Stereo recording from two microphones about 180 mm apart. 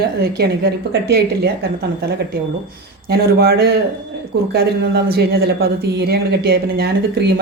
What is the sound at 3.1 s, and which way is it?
A man's voice, 60° right (ahead or behind).